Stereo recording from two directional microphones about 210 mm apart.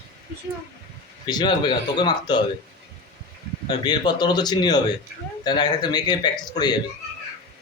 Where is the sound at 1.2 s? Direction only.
20° left (ahead or behind).